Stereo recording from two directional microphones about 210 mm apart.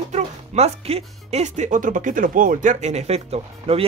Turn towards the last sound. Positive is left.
turn(degrees=-30)  # may be behind; listen again after turning